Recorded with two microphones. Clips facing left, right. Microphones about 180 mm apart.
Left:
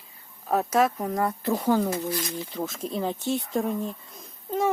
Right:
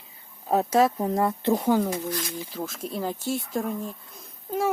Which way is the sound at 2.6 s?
Centre (ahead or behind).